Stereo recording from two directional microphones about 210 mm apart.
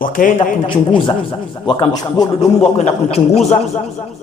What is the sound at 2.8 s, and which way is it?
A man's voice, 30° left (ahead or behind).